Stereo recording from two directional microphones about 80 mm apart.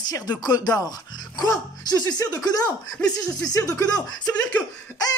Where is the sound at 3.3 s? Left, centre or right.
Left.